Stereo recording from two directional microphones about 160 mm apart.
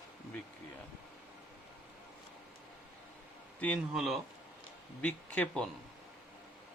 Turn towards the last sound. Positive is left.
turn(degrees=5)  # may be behind; listen again after turning